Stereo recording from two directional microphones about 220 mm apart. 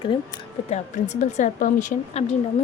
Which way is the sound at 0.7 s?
30° left (ahead or behind).